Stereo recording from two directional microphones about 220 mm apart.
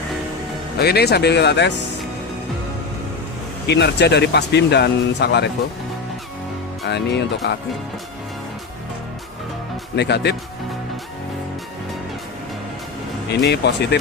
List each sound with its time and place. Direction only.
0.8 s speech: 45° left (ahead or behind)
3.7 s speech: 50° left (ahead or behind)
6.8 s speech: 50° left (ahead or behind)
9.9 s speech: 50° left (ahead or behind)
13.4 s speech: 50° left (ahead or behind)